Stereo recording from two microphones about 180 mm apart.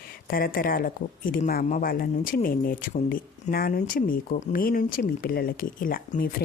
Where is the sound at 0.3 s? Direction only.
55° left (ahead or behind).